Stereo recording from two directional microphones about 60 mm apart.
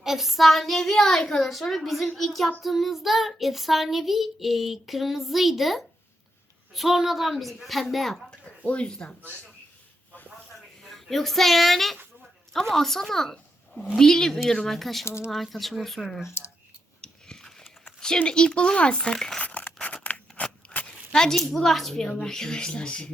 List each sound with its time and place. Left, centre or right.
0.0 s child singing: centre
8.3 s speech: left
10.8 s a child's voice: centre
15.0 s speech: left
15.3 s child singing: centre
17.0 s biting: centre
18.2 s speech: centre
19.4 s scissors: left
20.4 s zipper: centre
22.0 s speech: centre